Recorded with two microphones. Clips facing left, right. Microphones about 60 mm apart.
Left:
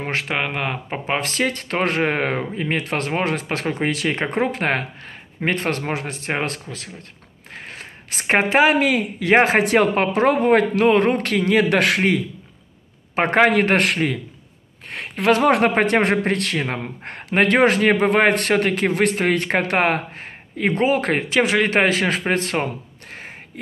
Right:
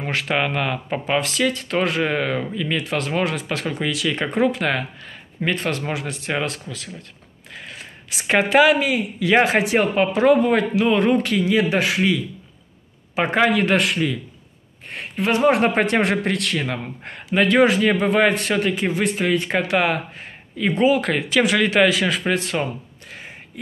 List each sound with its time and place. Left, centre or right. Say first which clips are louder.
0.0 s speech: left 1 dB; left
0.5 s speech: right 2 dB; left
1.1 s speech: right 1 dB; left
7.5 s a sound: left 1 dB; left
8.7 s speech: left 3 dB; left
9.7 s speech: left 1 dB; left
14.9 s speech: left 4 dB; left
15.7 s speech: left 2 dB; left
23.1 s a sound: left 1 dB; left